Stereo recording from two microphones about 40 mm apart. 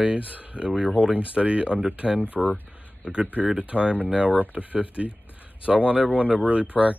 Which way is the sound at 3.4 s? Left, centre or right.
Right.